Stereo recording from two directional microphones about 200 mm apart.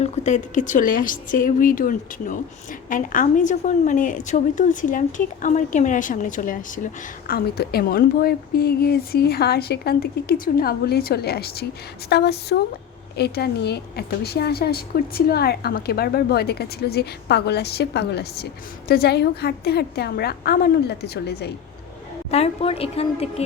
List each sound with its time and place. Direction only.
0.0 s a woman's voice: 40° left (ahead or behind); by 21.5 s 55° left (ahead or behind)
22.3 s a woman's voice: 30° left (ahead or behind)